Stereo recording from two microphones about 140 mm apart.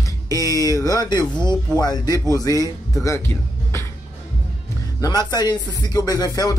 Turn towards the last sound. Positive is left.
turn(degrees=25)  # may be behind; listen again after turning